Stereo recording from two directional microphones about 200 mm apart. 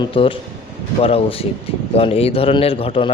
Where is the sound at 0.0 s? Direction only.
25° left (ahead or behind).